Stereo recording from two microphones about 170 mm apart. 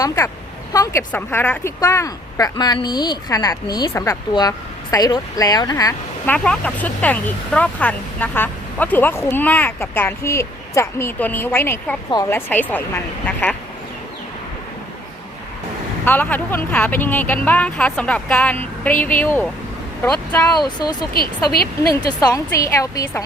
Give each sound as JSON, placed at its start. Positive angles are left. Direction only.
{"t": 0.7, "sound": "speech", "side_deg": 20}
{"t": 6.2, "sound": "speech", "side_deg": 5}
{"t": 16.0, "sound": "speech", "side_deg": 10}